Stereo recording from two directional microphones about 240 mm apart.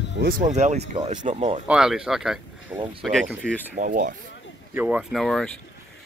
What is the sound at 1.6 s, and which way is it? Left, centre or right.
Speech, centre.